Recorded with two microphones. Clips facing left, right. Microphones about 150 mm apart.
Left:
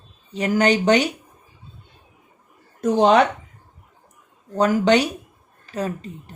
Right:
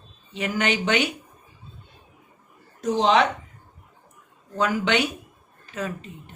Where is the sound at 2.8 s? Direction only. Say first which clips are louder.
Left 4 dB; 55° left (ahead or behind).